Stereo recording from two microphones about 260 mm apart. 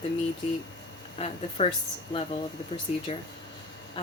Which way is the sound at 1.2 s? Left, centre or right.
Left.